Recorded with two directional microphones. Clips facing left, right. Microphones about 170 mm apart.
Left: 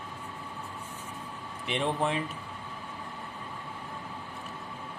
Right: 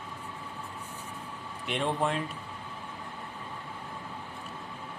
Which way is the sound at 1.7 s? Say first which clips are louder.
Even; centre (ahead or behind).